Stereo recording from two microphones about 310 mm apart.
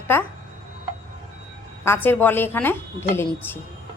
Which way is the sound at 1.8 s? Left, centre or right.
Centre.